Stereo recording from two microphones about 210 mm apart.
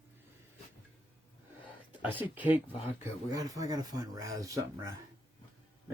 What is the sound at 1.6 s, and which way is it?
Speech, 10° right (ahead or behind).